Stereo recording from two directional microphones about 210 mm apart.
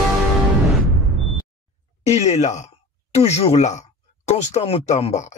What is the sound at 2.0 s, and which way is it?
Speech, 30° left (ahead or behind).